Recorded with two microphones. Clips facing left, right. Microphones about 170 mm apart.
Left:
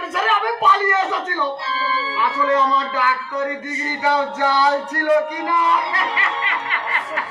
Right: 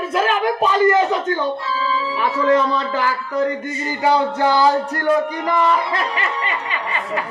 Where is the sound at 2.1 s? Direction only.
30° right (ahead or behind).